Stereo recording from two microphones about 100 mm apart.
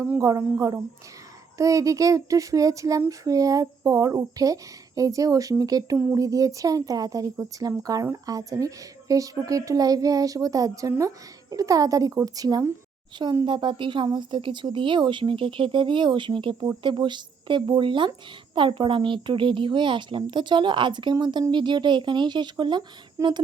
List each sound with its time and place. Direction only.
0.2 s speech: 35° right (ahead or behind)
13.4 s a woman's voice: 55° right (ahead or behind)
23.2 s a sound: 30° right (ahead or behind)